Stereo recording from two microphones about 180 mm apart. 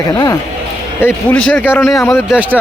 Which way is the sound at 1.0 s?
10° left (ahead or behind).